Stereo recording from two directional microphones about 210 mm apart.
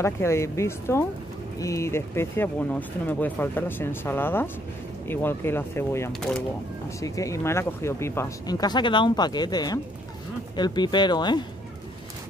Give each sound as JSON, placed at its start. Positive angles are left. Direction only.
{"t": 0.0, "sound": "speech", "side_deg": 10}
{"t": 7.0, "sound": "speech", "side_deg": 15}